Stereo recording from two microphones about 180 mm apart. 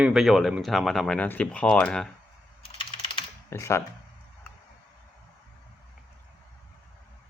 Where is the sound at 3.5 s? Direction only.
15° left (ahead or behind).